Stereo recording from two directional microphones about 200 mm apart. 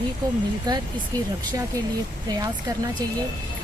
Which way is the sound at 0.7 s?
20° right (ahead or behind).